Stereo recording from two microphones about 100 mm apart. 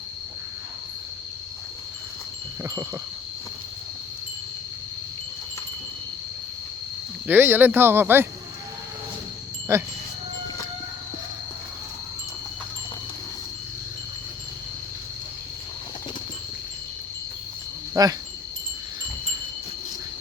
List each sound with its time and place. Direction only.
7.3 s speech: 20° right (ahead or behind)
9.7 s speech: 25° right (ahead or behind)
18.0 s wind chime: 35° right (ahead or behind)